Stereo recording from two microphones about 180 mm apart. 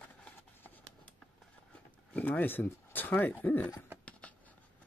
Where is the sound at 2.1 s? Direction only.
10° left (ahead or behind).